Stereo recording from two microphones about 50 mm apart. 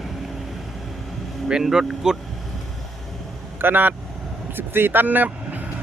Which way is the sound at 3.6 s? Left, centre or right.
Right.